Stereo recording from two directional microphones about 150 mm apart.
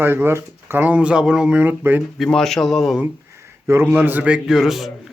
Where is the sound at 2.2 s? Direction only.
5° left (ahead or behind).